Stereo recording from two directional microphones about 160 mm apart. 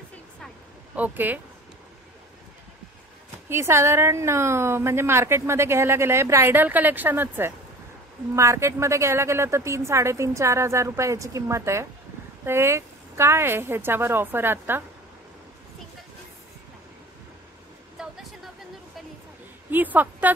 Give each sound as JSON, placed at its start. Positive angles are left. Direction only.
{"t": 0.9, "sound": "a woman's voice", "side_deg": -10}
{"t": 3.4, "sound": "a woman's voice", "side_deg": -15}
{"t": 17.9, "sound": "a sound", "side_deg": -5}
{"t": 19.7, "sound": "a woman's voice", "side_deg": -10}